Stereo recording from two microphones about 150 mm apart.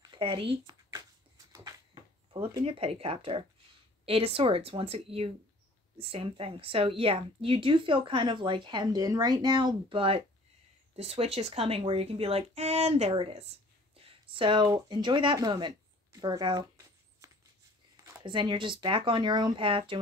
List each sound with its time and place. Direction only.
0.1 s speech: 35° right (ahead or behind)
1.5 s a sound: 25° right (ahead or behind)
2.6 s a woman's voice: 40° right (ahead or behind)